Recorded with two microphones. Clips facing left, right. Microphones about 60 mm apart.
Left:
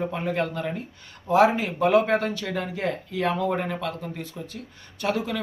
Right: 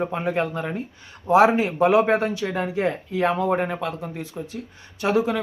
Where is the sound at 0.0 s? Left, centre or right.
Centre.